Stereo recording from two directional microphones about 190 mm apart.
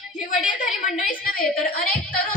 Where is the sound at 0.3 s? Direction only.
45° left (ahead or behind).